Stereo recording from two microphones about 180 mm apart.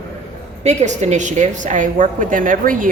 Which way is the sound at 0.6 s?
40° right (ahead or behind).